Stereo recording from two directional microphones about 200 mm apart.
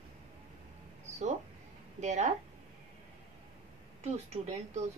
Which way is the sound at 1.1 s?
35° right (ahead or behind).